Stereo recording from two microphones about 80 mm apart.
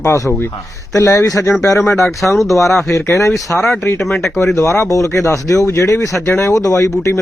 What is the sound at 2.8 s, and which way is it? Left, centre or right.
Speech, left.